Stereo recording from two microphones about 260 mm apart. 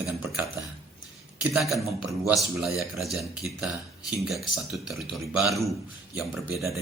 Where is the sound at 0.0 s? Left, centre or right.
Centre.